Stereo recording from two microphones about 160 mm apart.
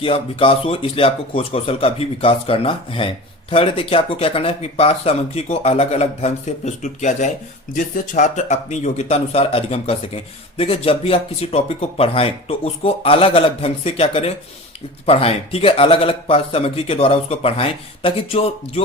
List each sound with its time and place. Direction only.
0.0 s speech: 35° left (ahead or behind)